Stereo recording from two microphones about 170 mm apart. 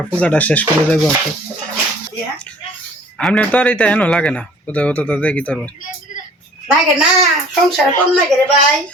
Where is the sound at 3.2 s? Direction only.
10° left (ahead or behind).